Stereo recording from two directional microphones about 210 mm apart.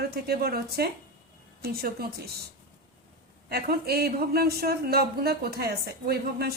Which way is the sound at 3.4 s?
50° right (ahead or behind).